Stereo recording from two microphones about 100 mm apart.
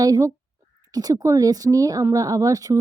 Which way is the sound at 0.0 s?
35° right (ahead or behind).